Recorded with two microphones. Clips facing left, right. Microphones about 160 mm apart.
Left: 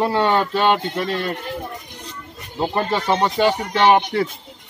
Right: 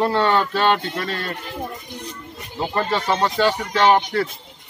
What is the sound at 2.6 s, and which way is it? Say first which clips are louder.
Speech: left 1 dB; 15° left (ahead or behind).